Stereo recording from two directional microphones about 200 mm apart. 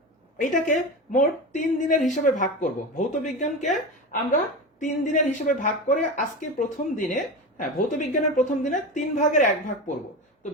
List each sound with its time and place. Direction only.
0.3 s a woman's voice: 40° left (ahead or behind)